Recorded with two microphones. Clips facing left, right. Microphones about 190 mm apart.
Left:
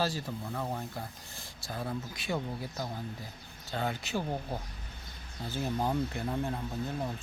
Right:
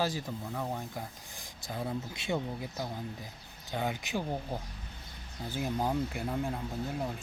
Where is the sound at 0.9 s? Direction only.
15° right (ahead or behind).